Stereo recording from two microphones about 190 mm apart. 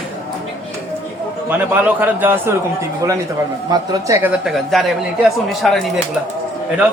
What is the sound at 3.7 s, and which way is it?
Speech, 20° right (ahead or behind).